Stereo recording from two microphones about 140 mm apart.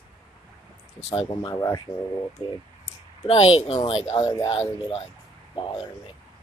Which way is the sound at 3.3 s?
45° left (ahead or behind).